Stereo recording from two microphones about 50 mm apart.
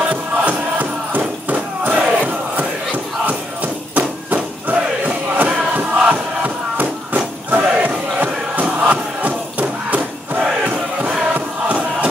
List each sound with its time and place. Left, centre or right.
0.1 s music: right
3.9 s a sound: right
8.6 s crowd: right
11.3 s music: right